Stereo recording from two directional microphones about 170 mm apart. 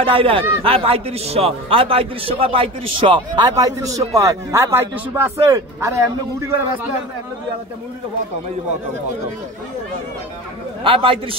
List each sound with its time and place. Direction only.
0.0 s speech: 35° right (ahead or behind); by 6.9 s 15° right (ahead or behind)
10.8 s a man's voice: 30° right (ahead or behind)